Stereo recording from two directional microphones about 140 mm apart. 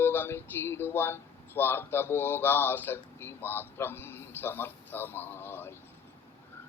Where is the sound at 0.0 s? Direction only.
15° left (ahead or behind).